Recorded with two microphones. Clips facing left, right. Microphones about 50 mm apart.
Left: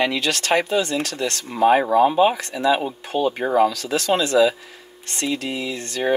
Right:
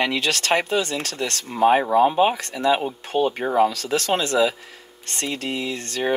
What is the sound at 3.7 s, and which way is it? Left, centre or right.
Speech, right.